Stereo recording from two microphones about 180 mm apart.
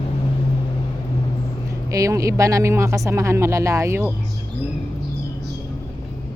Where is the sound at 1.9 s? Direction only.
20° right (ahead or behind).